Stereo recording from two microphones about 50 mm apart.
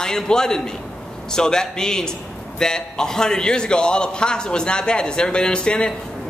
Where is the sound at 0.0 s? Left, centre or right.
Centre.